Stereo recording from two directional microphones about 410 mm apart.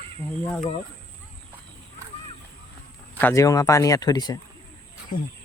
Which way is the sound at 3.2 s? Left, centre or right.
Centre.